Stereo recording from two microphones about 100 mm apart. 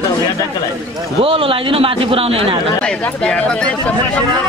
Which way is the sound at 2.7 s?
10° left (ahead or behind).